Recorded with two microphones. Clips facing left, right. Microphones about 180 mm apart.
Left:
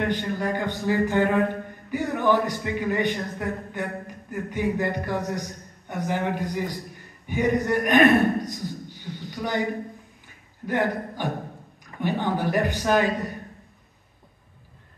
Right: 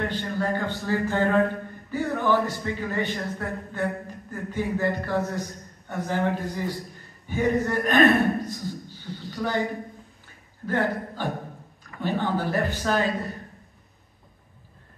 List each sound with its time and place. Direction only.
0.1 s a man's voice: 15° left (ahead or behind)
10.2 s a sound: 15° left (ahead or behind)
12.0 s a man's voice: 15° left (ahead or behind)